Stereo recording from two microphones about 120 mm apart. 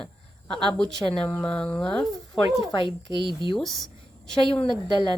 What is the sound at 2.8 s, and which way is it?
Speech, 40° right (ahead or behind).